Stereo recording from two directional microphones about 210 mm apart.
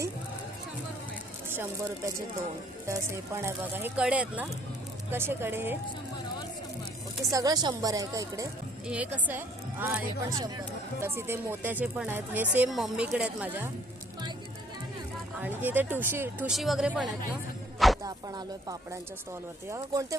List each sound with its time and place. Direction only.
1.5 s a woman's voice: 10° right (ahead or behind)
7.3 s a woman's voice: 15° right (ahead or behind)
15.4 s a woman's voice: 10° right (ahead or behind)
18.0 s a woman's voice: 15° right (ahead or behind)